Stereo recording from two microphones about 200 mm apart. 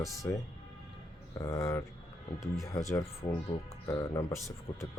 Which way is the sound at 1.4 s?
15° left (ahead or behind).